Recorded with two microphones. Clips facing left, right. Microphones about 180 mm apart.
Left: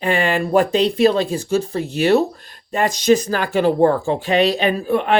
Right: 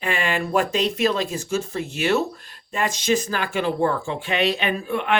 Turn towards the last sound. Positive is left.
turn(degrees=40)  # may be behind; listen again after turning